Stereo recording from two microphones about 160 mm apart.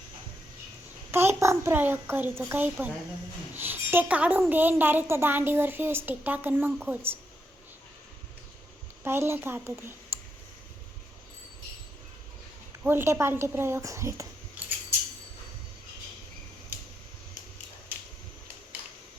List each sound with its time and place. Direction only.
1.1 s a woman's voice: 15° right (ahead or behind)
9.0 s a woman's voice: 15° right (ahead or behind)
10.1 s clicking: 15° right (ahead or behind)
12.8 s a woman's voice: 15° right (ahead or behind)
14.6 s a sound: 10° right (ahead or behind)